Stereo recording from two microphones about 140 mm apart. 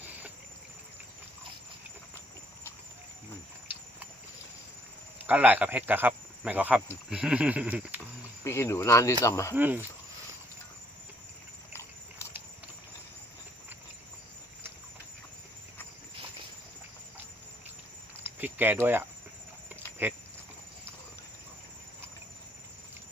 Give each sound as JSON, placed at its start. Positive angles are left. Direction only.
{"t": 0.0, "sound": "boat", "side_deg": -10}
{"t": 5.2, "sound": "speech", "side_deg": -10}
{"t": 8.4, "sound": "speech", "side_deg": 20}
{"t": 9.6, "sound": "speech", "side_deg": -15}
{"t": 11.7, "sound": "a sound", "side_deg": 20}
{"t": 18.2, "sound": "cricket", "side_deg": -15}